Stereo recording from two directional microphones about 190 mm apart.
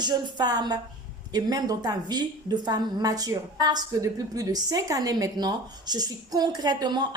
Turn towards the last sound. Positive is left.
turn(degrees=-20)  # may be behind; listen again after turning